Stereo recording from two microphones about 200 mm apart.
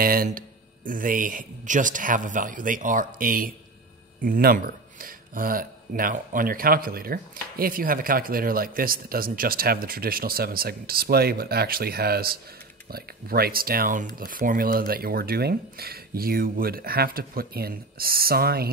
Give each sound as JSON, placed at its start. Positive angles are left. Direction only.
{"t": 0.0, "sound": "speech", "side_deg": -45}